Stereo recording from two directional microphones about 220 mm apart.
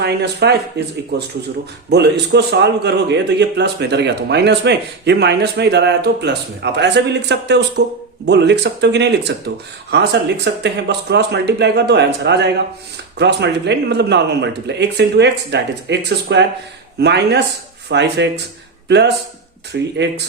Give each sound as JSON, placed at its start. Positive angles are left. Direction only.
{"t": 0.0, "sound": "a man's voice", "side_deg": -50}